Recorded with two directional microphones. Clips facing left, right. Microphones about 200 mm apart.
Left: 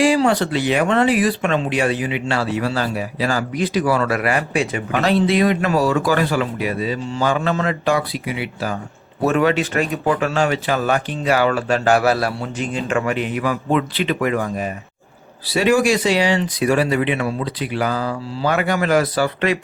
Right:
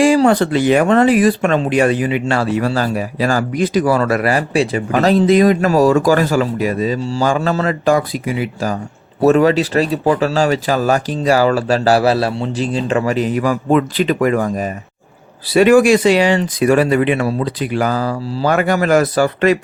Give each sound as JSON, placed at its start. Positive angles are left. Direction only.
{"t": 0.0, "sound": "speech", "side_deg": -45}
{"t": 15.5, "sound": "speech", "side_deg": -55}